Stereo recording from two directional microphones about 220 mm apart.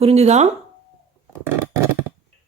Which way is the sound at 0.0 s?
30° right (ahead or behind).